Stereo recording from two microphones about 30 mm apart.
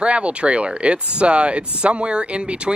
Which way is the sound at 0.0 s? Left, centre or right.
Right.